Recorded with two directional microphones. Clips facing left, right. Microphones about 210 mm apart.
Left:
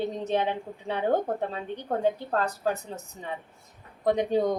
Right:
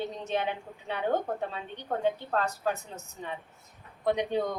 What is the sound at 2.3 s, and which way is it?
Speech, 40° left (ahead or behind).